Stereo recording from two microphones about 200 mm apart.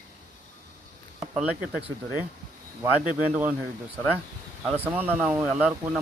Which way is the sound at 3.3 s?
5° right (ahead or behind).